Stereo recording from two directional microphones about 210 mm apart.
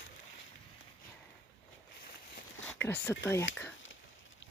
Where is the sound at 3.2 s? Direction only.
10° left (ahead or behind).